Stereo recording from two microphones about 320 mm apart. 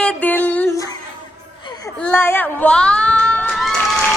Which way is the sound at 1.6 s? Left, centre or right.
Centre.